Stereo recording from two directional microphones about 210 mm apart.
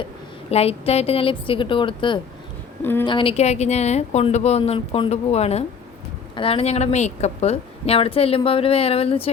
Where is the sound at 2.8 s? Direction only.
10° left (ahead or behind).